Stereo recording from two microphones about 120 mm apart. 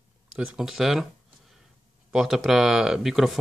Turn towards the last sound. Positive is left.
turn(degrees=0)  # may be behind; listen again after turning